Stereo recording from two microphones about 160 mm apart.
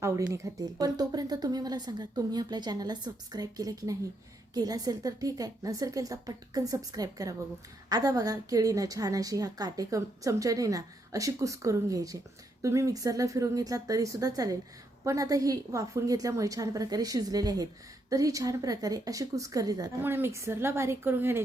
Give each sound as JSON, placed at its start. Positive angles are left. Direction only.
{"t": 0.0, "sound": "a woman's voice", "side_deg": -20}